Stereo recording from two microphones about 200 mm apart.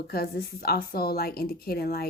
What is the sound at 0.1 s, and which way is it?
Speech, 50° left (ahead or behind).